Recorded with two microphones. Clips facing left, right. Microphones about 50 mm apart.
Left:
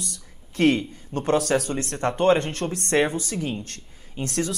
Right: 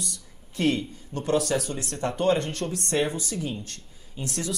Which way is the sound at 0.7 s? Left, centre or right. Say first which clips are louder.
Left 4 dB; left.